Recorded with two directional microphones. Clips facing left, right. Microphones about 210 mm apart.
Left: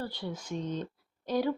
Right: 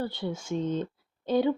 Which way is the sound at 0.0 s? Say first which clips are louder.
Right 5 dB; 25° right (ahead or behind).